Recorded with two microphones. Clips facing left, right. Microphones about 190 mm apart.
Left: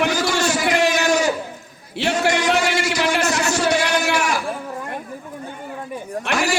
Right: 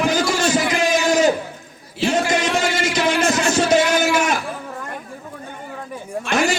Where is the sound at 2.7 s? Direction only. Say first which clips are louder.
Right 1 dB; 25° right (ahead or behind).